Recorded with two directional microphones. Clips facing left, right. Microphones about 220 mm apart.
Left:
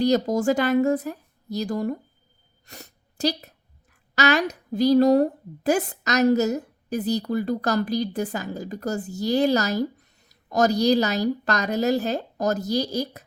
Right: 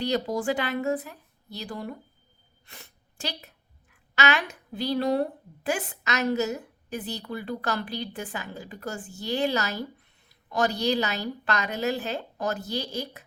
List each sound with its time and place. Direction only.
0.0 s a woman's voice: 40° left (ahead or behind)